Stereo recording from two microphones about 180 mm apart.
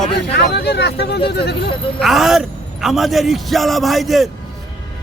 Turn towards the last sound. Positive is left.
turn(degrees=0)  # may be behind; listen again after turning